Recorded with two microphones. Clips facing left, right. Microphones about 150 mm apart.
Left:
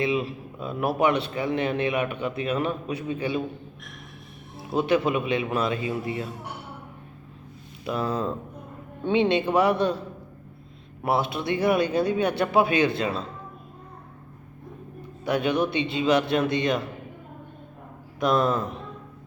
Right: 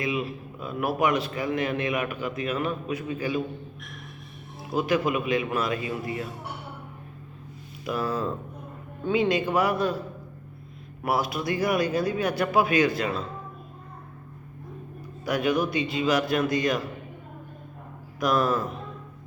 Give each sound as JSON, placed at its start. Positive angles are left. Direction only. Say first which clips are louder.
{"t": 0.0, "sound": "a man's voice", "louder": "left 3 dB", "side_deg": 30}
{"t": 4.8, "sound": "speech", "louder": "left 2 dB", "side_deg": 30}
{"t": 7.9, "sound": "speech", "louder": "left 1 dB", "side_deg": 30}
{"t": 11.0, "sound": "speech", "louder": "left 1 dB", "side_deg": 25}
{"t": 15.2, "sound": "speech", "louder": "left 1 dB", "side_deg": 30}
{"t": 18.2, "sound": "speech", "louder": "left 1 dB", "side_deg": 25}